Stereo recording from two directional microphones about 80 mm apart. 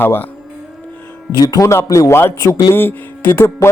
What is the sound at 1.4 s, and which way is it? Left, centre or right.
Speech, left.